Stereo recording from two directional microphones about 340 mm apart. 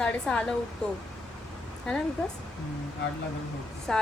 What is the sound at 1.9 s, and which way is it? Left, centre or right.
Speech, centre.